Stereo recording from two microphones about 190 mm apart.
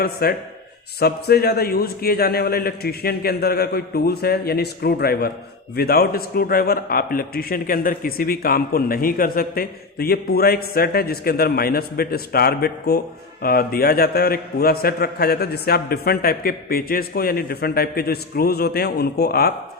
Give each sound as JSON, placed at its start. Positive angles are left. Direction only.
{"t": 0.0, "sound": "a man's voice", "side_deg": 50}